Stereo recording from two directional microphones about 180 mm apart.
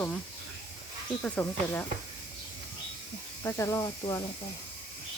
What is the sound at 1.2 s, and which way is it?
Speech, 10° left (ahead or behind).